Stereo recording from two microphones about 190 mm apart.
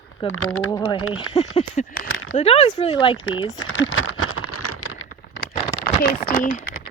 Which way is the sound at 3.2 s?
90° left.